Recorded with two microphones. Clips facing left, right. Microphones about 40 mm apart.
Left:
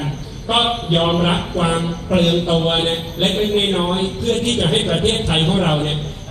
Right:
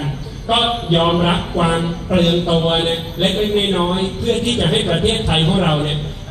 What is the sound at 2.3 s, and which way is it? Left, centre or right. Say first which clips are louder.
A man's voice: right 1 dB; centre.